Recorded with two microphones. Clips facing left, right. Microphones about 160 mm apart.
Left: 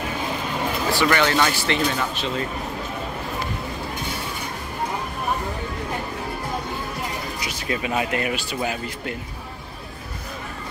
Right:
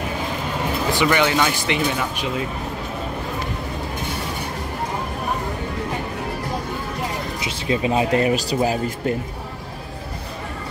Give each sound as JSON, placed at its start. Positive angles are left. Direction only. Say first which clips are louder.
{"t": 0.9, "sound": "speech", "louder": "right 1 dB", "side_deg": -15}
{"t": 7.3, "sound": "speech", "louder": "right 4 dB", "side_deg": -25}